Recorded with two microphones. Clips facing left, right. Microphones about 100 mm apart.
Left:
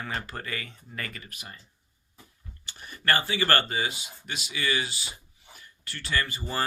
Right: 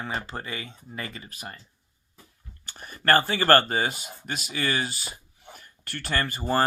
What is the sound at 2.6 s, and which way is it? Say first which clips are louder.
Speech: right 3 dB; 45° right (ahead or behind).